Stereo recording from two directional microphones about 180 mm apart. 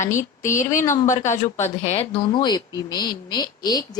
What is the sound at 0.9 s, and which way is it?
Speech, 15° left (ahead or behind).